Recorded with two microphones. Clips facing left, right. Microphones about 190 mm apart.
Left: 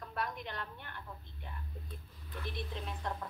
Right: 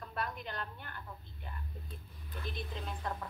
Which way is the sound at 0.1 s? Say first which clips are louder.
Even; centre (ahead or behind).